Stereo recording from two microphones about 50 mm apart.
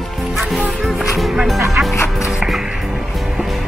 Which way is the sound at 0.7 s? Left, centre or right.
Centre.